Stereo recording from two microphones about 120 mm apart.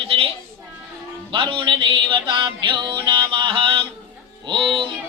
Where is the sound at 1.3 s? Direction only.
45° right (ahead or behind).